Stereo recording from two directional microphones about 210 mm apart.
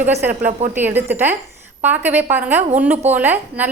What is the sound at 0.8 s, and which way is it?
A woman's voice, 10° right (ahead or behind).